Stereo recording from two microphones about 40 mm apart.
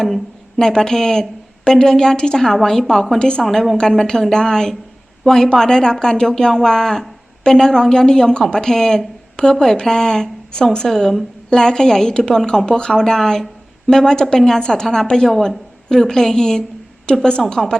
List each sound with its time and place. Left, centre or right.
0.0 s a sound: centre
0.6 s speech: centre
3.2 s a woman's voice: left
3.4 s a woman's voice: centre
3.8 s a woman's voice: centre